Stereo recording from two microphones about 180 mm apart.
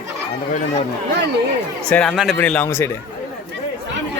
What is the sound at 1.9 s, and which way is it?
Speech, 5° left (ahead or behind).